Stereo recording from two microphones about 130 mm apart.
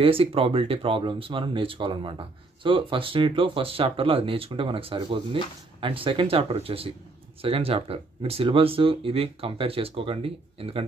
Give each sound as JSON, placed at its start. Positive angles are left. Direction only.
{"t": 0.0, "sound": "speech", "side_deg": -45}